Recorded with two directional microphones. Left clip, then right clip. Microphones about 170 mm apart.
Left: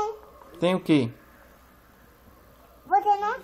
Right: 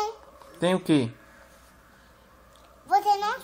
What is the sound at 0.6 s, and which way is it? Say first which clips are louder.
Speech: left 1 dB; 35° right (ahead or behind).